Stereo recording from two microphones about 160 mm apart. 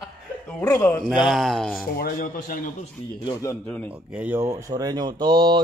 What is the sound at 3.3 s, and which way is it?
Speech, 20° left (ahead or behind).